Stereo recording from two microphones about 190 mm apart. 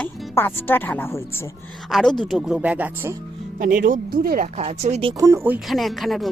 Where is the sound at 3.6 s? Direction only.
45° right (ahead or behind).